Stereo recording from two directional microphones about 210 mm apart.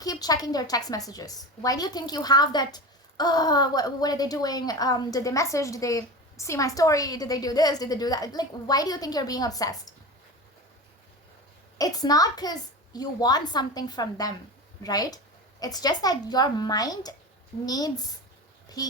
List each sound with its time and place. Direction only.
0.0 s a woman's voice: 20° left (ahead or behind)
11.8 s a woman's voice: 20° left (ahead or behind)